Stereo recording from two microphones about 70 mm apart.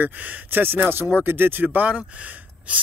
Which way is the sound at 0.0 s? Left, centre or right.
Right.